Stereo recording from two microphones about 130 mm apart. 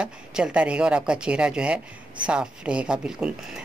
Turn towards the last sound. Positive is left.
turn(degrees=-5)  # may be behind; listen again after turning